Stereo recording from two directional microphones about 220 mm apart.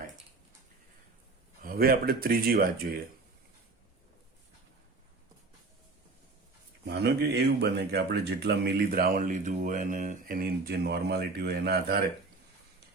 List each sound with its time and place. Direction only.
1.6 s speech: 40° right (ahead or behind)
6.8 s speech: 50° right (ahead or behind)